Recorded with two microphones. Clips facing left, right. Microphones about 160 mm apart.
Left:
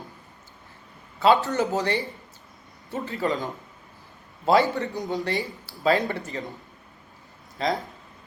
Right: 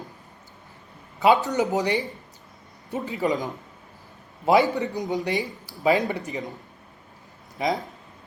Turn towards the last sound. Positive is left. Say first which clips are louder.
# right 1 dB
turn(degrees=-10)  # may be behind; listen again after turning